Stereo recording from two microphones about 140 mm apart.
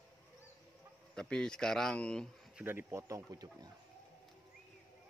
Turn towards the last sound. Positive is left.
turn(degrees=-25)  # may be behind; listen again after turning